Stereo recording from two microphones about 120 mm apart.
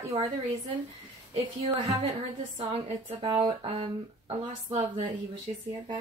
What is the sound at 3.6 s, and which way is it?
Speech, 50° right (ahead or behind).